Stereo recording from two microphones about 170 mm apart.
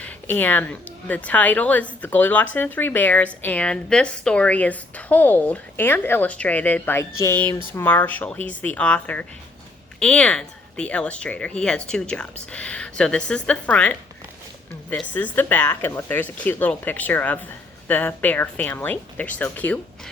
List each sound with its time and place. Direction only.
0.0 s a woman's voice: 10° left (ahead or behind)